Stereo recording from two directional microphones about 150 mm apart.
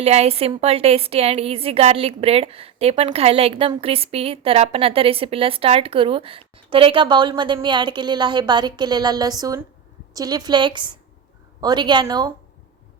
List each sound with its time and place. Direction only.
0.0 s a woman's voice: 45° right (ahead or behind); by 12.3 s 25° right (ahead or behind)